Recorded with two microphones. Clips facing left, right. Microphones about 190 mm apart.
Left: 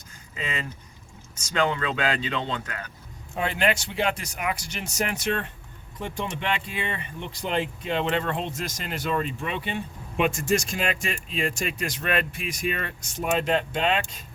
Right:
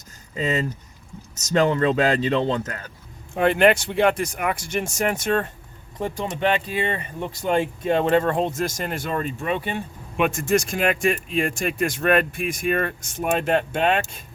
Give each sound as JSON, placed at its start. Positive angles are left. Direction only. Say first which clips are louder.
{"t": 0.3, "sound": "speech", "louder": "right 9 dB", "side_deg": -40}
{"t": 3.3, "sound": "speech", "louder": "right 8 dB", "side_deg": -60}